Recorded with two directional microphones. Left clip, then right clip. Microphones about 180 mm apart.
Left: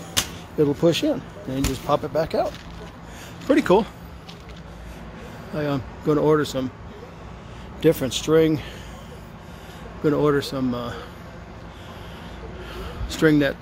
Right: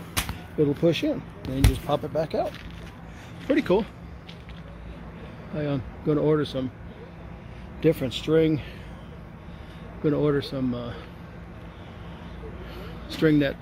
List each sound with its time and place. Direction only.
0.6 s speech: 5° left (ahead or behind)
5.6 s speech: 5° left (ahead or behind)
7.8 s speech: 5° left (ahead or behind)
10.0 s speech: 5° left (ahead or behind)
13.1 s speech: 5° left (ahead or behind)